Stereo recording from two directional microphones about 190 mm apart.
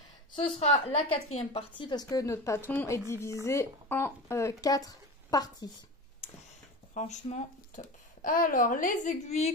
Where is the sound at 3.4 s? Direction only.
15° left (ahead or behind).